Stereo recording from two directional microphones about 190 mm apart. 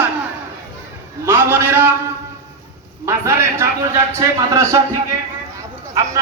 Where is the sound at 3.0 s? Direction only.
15° right (ahead or behind).